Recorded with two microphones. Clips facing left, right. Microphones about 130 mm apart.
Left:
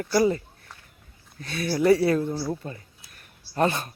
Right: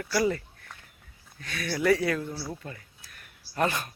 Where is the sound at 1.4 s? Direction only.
30° left (ahead or behind).